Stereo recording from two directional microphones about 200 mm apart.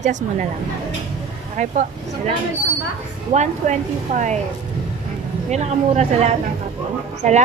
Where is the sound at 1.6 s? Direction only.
35° right (ahead or behind).